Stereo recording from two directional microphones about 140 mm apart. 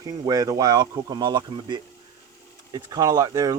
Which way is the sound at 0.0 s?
25° right (ahead or behind).